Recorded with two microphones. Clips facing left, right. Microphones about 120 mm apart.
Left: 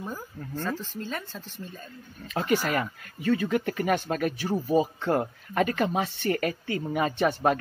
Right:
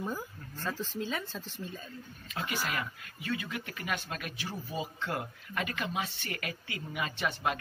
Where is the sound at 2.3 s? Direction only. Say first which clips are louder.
Left 10 dB; 45° left (ahead or behind).